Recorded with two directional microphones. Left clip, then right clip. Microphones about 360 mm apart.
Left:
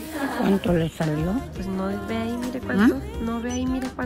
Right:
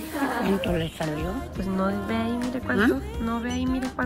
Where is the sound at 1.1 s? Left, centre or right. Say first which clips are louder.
Left 3 dB; centre.